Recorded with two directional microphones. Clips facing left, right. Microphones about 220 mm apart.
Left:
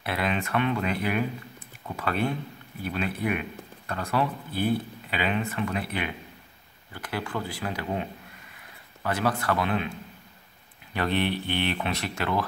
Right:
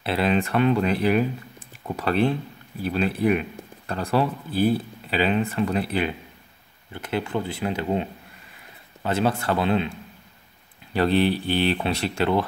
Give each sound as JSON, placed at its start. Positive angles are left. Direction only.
{"t": 0.0, "sound": "speech", "side_deg": -30}